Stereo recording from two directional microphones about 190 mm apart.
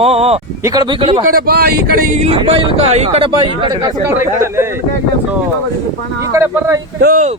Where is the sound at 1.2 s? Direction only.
50° right (ahead or behind).